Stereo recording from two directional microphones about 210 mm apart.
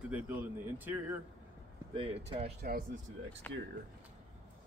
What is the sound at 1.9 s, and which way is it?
Speech, 25° right (ahead or behind).